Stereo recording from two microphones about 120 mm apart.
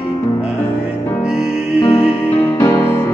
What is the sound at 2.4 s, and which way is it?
Music, 25° left (ahead or behind).